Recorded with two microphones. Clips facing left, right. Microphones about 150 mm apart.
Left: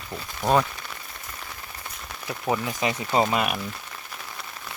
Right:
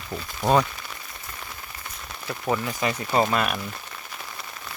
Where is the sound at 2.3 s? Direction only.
10° left (ahead or behind).